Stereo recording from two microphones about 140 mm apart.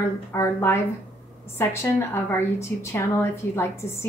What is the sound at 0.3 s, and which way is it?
A woman's voice, 20° left (ahead or behind).